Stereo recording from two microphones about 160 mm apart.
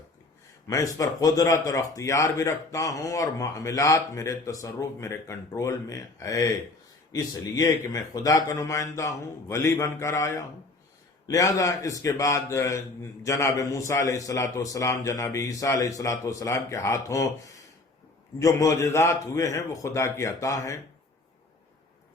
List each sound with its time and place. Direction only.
0.7 s speech: 20° left (ahead or behind)
18.3 s speech: 20° left (ahead or behind)